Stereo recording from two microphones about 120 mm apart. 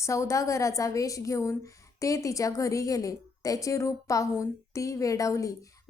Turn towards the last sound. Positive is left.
turn(degrees=25)  # may be behind; listen again after turning